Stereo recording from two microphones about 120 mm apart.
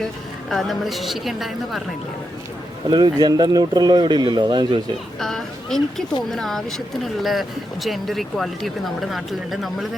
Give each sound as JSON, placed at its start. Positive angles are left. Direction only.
{"t": 0.5, "sound": "speech", "side_deg": 0}
{"t": 2.9, "sound": "speech", "side_deg": -35}
{"t": 5.2, "sound": "speech", "side_deg": 5}